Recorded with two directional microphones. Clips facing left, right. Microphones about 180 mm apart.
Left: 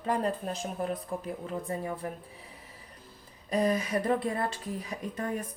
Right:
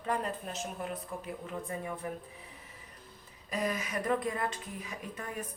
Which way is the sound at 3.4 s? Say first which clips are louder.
Left 7 dB; 35° left (ahead or behind).